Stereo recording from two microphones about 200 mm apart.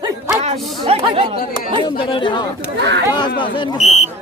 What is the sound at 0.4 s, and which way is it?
Chatter, 30° right (ahead or behind).